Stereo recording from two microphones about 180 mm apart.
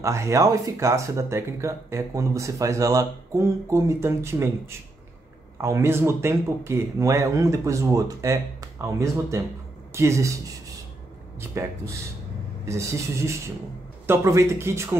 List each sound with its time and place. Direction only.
0.0 s speech: 15° right (ahead or behind)
11.5 s speech: 15° right (ahead or behind)